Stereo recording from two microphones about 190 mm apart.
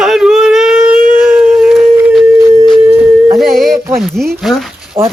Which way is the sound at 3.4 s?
Centre (ahead or behind).